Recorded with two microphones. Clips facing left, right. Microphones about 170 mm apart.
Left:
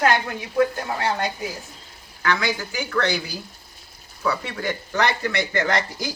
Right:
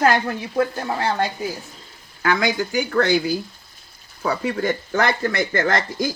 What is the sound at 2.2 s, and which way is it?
Speech, 45° right (ahead or behind).